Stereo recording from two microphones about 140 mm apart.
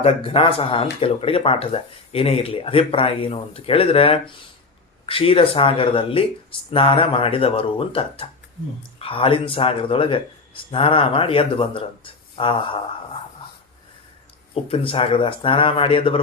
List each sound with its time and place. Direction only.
0.0 s speech: 40° left (ahead or behind)
14.5 s speech: 40° left (ahead or behind)